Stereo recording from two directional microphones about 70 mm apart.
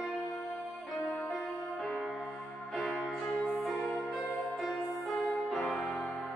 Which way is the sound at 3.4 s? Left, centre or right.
Centre.